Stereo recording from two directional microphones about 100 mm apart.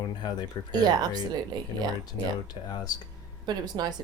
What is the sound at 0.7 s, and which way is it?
Speech, 45° right (ahead or behind).